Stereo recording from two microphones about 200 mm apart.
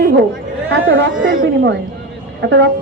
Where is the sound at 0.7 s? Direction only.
70° right (ahead or behind).